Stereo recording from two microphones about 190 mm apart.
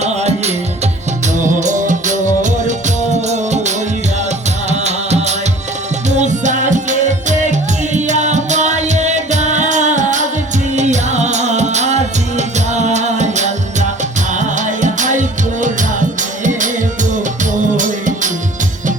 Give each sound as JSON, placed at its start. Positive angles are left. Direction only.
{"t": 0.0, "sound": "music", "side_deg": -35}